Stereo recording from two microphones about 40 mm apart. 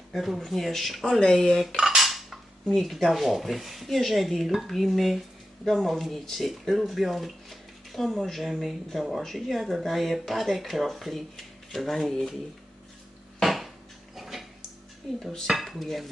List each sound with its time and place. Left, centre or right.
0.1 s speech: centre
1.2 s speech: centre
2.0 s cutlery: centre
2.6 s speech: centre
3.1 s speech: centre
5.6 s speech: centre
13.4 s a sound: centre
15.4 s speech: centre